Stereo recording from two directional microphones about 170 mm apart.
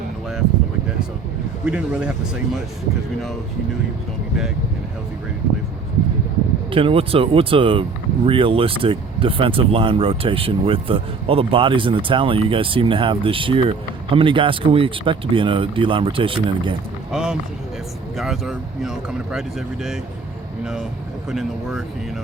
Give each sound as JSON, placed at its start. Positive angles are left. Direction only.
{"t": 1.6, "sound": "speech", "side_deg": -5}
{"t": 6.7, "sound": "speech", "side_deg": -30}
{"t": 17.1, "sound": "run", "side_deg": -5}
{"t": 18.2, "sound": "speech", "side_deg": -5}
{"t": 21.2, "sound": "speech", "side_deg": -5}